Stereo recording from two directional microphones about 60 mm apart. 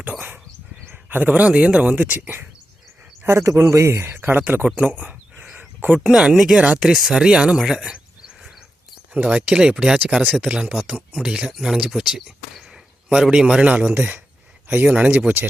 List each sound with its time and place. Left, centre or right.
0.1 s dog: right
0.9 s a sound: right
1.3 s speech: centre
3.2 s a man's voice: right
4.8 s a sound: right
5.9 s speech: centre
9.1 s speech: right
9.5 s speech: centre
10.1 s speech: centre
11.3 s a man's voice: centre
14.8 s speech: right